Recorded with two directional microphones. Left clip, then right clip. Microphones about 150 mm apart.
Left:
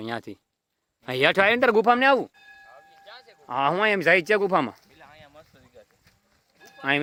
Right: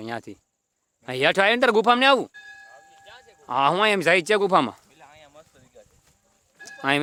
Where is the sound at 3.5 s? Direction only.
20° right (ahead or behind).